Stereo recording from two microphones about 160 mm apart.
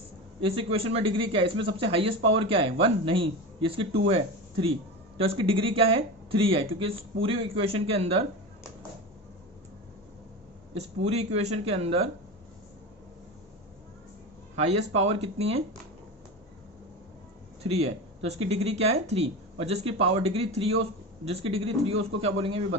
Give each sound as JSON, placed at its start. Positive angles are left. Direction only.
{"t": 0.4, "sound": "speech", "side_deg": -35}
{"t": 10.8, "sound": "speech", "side_deg": -40}
{"t": 14.5, "sound": "speech", "side_deg": -45}
{"t": 17.6, "sound": "speech", "side_deg": -40}